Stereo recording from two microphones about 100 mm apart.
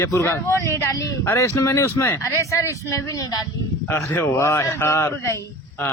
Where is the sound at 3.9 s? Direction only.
20° left (ahead or behind).